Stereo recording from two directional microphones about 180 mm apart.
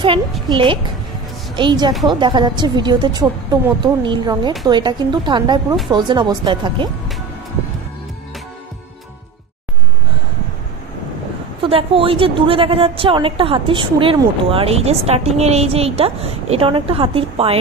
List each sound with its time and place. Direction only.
0.0 s a woman's voice: 30° right (ahead or behind)
11.6 s a woman's voice: 30° right (ahead or behind)